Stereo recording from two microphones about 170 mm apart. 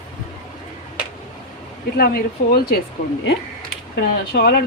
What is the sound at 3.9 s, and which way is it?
Speech, 70° left (ahead or behind).